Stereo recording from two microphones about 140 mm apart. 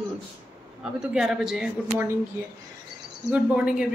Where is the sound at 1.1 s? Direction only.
5° right (ahead or behind).